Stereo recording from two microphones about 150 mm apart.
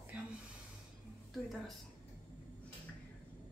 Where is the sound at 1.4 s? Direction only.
Centre (ahead or behind).